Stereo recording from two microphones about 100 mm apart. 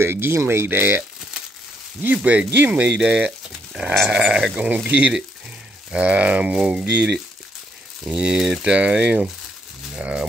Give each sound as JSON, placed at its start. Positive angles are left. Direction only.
{"t": 0.0, "sound": "speech", "side_deg": -25}
{"t": 2.1, "sound": "speech", "side_deg": -15}
{"t": 3.9, "sound": "speech", "side_deg": -5}